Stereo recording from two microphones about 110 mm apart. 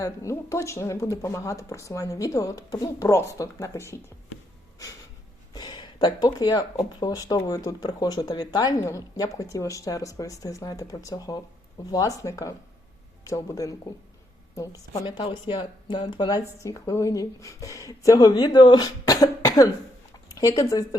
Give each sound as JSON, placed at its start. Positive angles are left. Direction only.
{"t": 0.0, "sound": "speech", "side_deg": 25}
{"t": 5.5, "sound": "a sound", "side_deg": 45}
{"t": 7.0, "sound": "a woman's voice", "side_deg": 35}
{"t": 15.0, "sound": "speech", "side_deg": 45}
{"t": 16.6, "sound": "speech", "side_deg": 30}